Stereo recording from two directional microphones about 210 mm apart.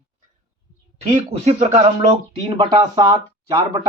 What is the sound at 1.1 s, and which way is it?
Speech, 30° right (ahead or behind).